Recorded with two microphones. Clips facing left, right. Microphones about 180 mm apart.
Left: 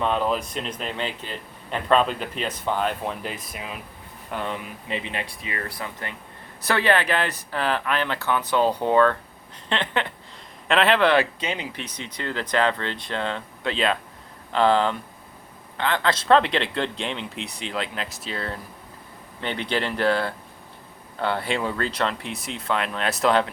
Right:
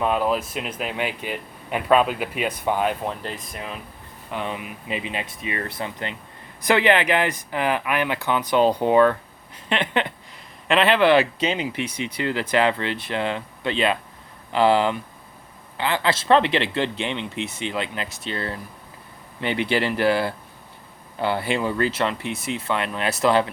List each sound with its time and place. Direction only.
0.0 s speech: 5° right (ahead or behind)
3.2 s speech: 5° left (ahead or behind); by 10.1 s 15° right (ahead or behind)
10.7 s speech: centre (ahead or behind)
11.2 s speech: 25° right (ahead or behind)
11.8 s speech: 10° right (ahead or behind)